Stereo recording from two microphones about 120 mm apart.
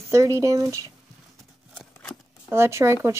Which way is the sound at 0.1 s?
25° right (ahead or behind).